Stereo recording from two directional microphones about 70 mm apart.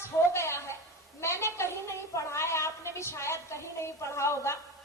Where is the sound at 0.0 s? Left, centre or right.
Left.